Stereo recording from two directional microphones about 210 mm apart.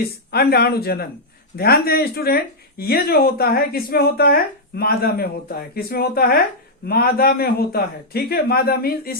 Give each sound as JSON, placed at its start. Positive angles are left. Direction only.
{"t": 0.0, "sound": "speech", "side_deg": 50}